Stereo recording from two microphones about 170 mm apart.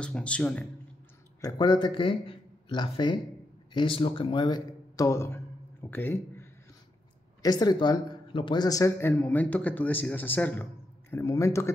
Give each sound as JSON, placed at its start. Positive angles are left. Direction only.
{"t": 0.0, "sound": "a man's voice", "side_deg": 5}
{"t": 1.4, "sound": "a man's voice", "side_deg": 25}